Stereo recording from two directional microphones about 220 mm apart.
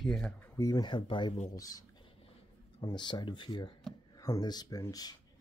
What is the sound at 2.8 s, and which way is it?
Speech, 20° left (ahead or behind).